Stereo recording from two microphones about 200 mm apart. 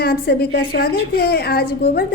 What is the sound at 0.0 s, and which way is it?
A woman's voice, 50° left (ahead or behind).